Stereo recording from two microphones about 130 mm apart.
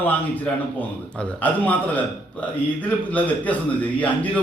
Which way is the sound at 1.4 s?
15° left (ahead or behind).